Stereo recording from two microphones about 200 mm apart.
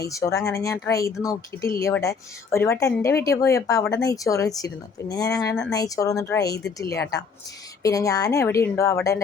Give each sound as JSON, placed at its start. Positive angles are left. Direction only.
{"t": 0.0, "sound": "a woman's voice", "side_deg": 15}